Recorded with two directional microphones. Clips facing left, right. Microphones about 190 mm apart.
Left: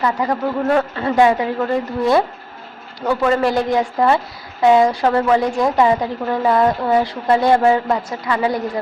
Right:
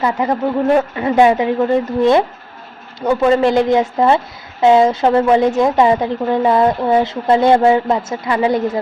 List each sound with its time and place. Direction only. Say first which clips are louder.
0.0 s a woman's voice: right 2 dB; 20° right (ahead or behind)